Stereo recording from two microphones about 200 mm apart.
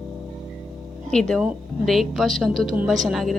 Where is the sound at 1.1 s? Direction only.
5° left (ahead or behind).